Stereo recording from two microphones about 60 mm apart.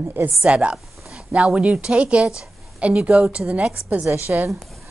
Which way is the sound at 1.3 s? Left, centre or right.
Centre.